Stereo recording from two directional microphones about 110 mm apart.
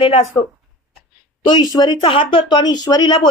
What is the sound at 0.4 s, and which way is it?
Speech, 40° left (ahead or behind).